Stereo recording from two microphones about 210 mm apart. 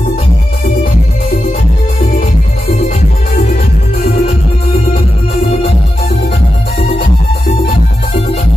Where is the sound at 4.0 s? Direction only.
25° left (ahead or behind).